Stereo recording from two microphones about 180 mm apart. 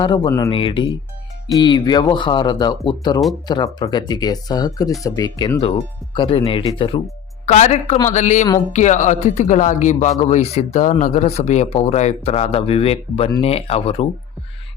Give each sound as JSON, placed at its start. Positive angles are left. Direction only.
{"t": 0.0, "sound": "speech", "side_deg": 25}
{"t": 0.3, "sound": "speech", "side_deg": 15}
{"t": 0.5, "sound": "speech", "side_deg": 30}
{"t": 5.5, "sound": "speech", "side_deg": 30}